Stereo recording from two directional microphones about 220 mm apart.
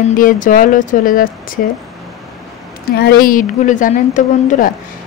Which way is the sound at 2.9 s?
45° left (ahead or behind).